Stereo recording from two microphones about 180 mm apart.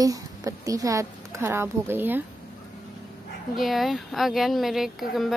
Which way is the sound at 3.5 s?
Centre (ahead or behind).